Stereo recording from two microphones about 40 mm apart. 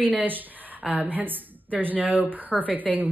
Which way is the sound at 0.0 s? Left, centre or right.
Right.